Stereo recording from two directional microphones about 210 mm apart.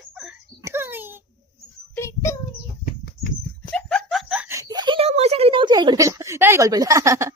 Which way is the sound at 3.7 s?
5° left (ahead or behind).